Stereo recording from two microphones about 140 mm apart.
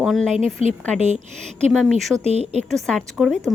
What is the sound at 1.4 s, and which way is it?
A woman's voice, 5° left (ahead or behind).